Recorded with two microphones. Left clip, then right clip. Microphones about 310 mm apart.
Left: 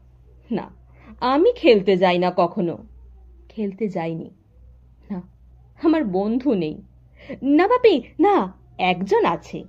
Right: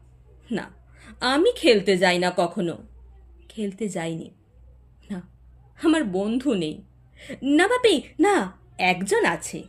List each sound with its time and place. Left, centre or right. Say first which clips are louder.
0.4 s a woman's voice: left 3 dB; centre
5.7 s a woman's voice: left 2 dB; centre